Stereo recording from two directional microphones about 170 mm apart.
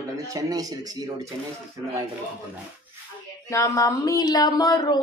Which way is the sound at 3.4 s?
15° left (ahead or behind).